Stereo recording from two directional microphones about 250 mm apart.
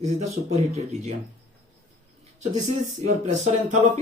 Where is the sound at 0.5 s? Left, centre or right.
Right.